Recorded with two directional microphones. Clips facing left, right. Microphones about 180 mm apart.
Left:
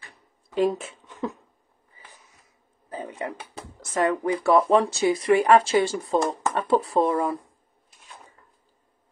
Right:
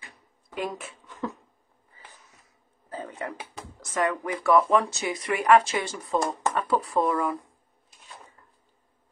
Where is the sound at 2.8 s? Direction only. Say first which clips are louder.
Left 2 dB; 20° left (ahead or behind).